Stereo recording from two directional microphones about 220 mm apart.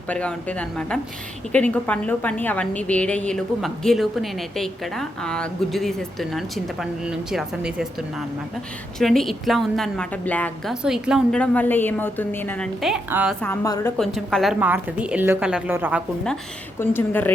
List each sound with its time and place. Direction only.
0.1 s a woman's voice: 5° left (ahead or behind)
9.0 s a woman's voice: centre (ahead or behind)
13.4 s a woman's voice: 10° left (ahead or behind)
14.0 s a woman's voice: centre (ahead or behind)
16.8 s a woman's voice: 10° left (ahead or behind)